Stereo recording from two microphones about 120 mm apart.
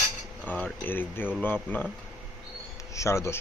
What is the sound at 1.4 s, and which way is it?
Speech, 15° left (ahead or behind).